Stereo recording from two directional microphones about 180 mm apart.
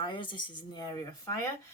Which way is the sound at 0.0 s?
25° left (ahead or behind).